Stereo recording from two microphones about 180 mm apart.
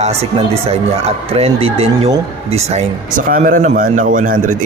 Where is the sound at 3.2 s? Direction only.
50° right (ahead or behind).